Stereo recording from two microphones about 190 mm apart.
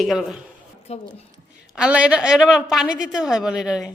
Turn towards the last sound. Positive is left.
turn(degrees=-5)  # may be behind; listen again after turning